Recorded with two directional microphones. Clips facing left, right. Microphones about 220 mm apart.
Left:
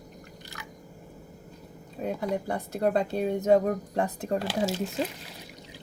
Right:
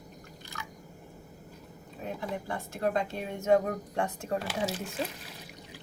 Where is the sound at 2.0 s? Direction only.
40° left (ahead or behind).